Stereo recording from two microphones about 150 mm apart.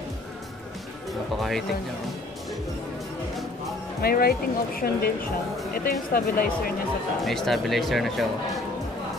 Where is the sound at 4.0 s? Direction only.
85° left.